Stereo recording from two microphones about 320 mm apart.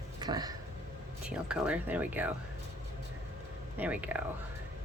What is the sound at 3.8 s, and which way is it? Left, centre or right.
Speech, centre.